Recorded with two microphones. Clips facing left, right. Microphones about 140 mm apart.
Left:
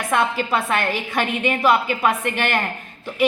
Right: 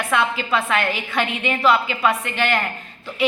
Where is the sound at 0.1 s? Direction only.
40° left (ahead or behind).